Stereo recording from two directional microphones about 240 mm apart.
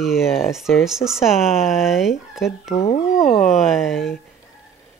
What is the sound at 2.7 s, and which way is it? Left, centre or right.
Speech, left.